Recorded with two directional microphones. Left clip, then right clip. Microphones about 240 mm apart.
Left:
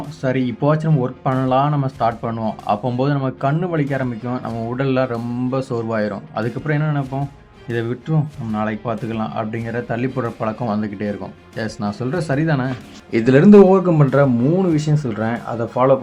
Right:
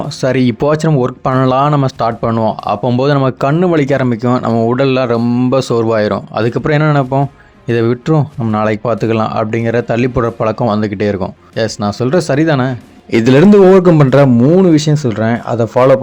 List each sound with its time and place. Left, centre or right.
0.2 s speech: right